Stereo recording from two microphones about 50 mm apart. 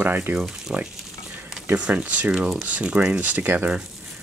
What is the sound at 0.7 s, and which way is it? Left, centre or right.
Speech, centre.